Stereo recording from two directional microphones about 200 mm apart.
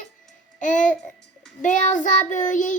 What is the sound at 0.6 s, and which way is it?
A child's voice, 40° left (ahead or behind).